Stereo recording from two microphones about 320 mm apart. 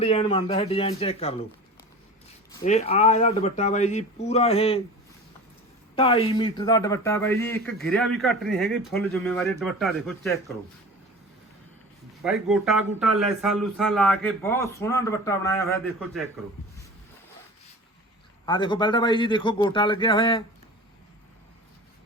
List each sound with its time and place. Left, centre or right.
0.0 s a man's voice: centre
2.6 s speech: centre
6.0 s a man's voice: centre
12.2 s a man's voice: centre
18.4 s a man's voice: centre